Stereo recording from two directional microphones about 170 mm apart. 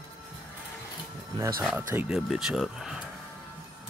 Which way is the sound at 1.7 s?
5° right (ahead or behind).